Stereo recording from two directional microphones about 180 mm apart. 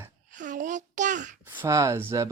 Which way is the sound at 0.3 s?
45° right (ahead or behind).